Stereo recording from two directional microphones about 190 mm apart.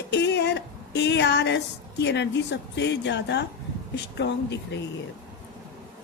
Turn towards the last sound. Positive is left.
turn(degrees=65)  # may be behind; listen again after turning